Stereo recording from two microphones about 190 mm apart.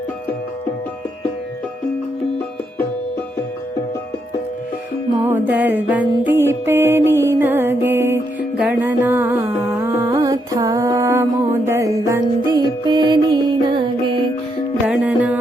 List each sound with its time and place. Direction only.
5.2 s music: 10° right (ahead or behind); by 14.2 s 30° right (ahead or behind)
14.8 s music: 5° right (ahead or behind)